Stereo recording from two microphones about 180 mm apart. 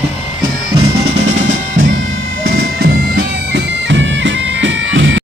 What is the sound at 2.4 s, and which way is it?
Bagpipes, 60° right (ahead or behind).